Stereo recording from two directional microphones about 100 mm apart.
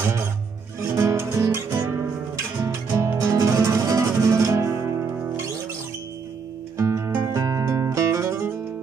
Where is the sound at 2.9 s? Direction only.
20° right (ahead or behind).